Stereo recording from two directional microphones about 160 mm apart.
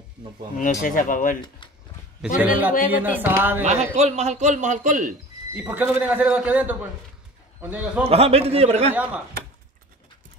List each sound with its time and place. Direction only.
0.6 s speech: 55° left (ahead or behind)
2.2 s a man's voice: 5° right (ahead or behind)
3.6 s speech: 45° right (ahead or behind)
5.5 s speech: 10° right (ahead or behind)
8.1 s a man's voice: 40° right (ahead or behind)
8.9 s speech: 10° right (ahead or behind)